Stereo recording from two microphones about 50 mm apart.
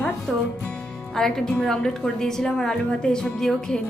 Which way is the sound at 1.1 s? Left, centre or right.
Centre.